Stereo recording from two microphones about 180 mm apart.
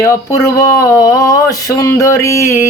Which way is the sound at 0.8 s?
20° left (ahead or behind).